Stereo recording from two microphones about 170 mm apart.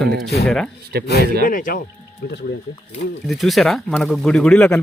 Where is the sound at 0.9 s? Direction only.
65° right (ahead or behind).